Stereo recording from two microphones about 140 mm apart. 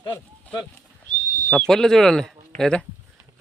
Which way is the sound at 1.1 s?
75° left (ahead or behind).